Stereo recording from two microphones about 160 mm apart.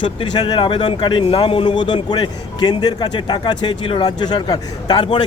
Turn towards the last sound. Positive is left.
turn(degrees=30)  # may be behind; listen again after turning